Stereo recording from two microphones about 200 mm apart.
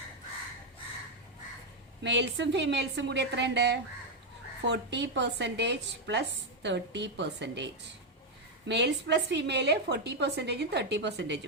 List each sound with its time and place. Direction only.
2.0 s a woman's voice: 60° right (ahead or behind)